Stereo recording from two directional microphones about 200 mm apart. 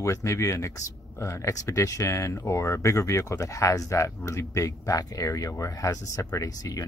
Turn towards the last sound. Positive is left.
turn(degrees=15)  # may be behind; listen again after turning